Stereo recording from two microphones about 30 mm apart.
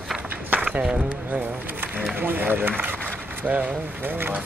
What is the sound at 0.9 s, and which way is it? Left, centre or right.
Music, right.